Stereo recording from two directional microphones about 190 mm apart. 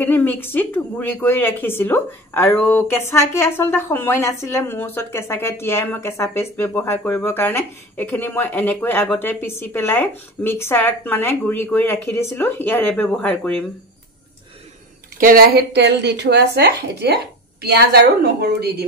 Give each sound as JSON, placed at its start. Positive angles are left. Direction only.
{"t": 0.0, "sound": "speech", "side_deg": 10}
{"t": 15.1, "sound": "a woman's voice", "side_deg": -50}